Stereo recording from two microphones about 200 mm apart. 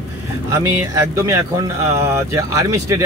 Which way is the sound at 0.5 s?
15° right (ahead or behind).